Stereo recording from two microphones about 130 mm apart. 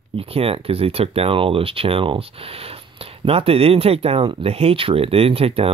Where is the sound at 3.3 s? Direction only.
45° right (ahead or behind).